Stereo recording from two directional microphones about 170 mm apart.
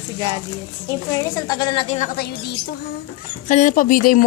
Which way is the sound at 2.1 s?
70° left (ahead or behind).